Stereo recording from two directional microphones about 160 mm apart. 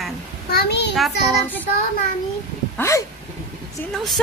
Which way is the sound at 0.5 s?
85° left.